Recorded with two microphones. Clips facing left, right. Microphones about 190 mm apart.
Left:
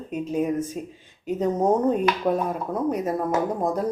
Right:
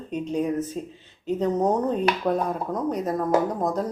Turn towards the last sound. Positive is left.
turn(degrees=10)  # may be behind; listen again after turning